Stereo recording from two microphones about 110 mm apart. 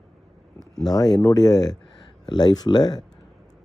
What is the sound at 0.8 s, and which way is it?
Speech, 35° left (ahead or behind).